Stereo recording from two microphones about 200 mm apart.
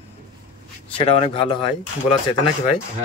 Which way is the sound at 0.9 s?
30° left (ahead or behind).